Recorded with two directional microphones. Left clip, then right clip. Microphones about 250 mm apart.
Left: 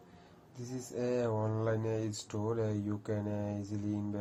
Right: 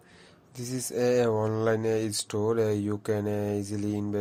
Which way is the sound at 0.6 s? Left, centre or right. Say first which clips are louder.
Right 10 dB; right.